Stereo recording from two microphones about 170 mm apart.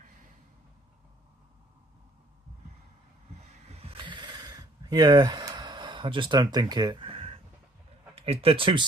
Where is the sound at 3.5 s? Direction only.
40° right (ahead or behind).